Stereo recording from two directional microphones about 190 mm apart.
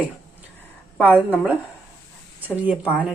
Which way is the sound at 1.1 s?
5° left (ahead or behind).